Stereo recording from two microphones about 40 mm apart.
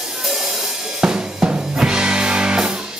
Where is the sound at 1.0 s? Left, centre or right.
Right.